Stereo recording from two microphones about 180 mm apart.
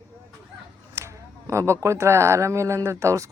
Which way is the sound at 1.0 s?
15° right (ahead or behind).